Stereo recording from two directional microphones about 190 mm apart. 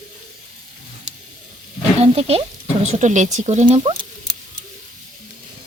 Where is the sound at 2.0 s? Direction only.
30° right (ahead or behind).